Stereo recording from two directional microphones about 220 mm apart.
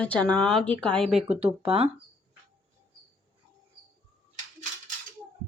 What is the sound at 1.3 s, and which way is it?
Speech, 25° right (ahead or behind).